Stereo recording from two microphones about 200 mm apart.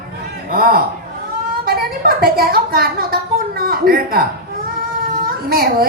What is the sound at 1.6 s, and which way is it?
A woman's voice, 50° right (ahead or behind).